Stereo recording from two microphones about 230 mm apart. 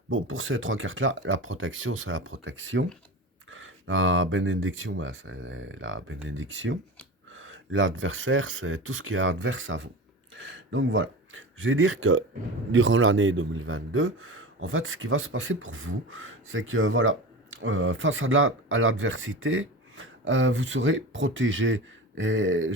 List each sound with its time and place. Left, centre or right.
0.1 s a man's voice: right